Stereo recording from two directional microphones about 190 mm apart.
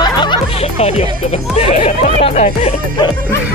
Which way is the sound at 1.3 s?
35° left (ahead or behind).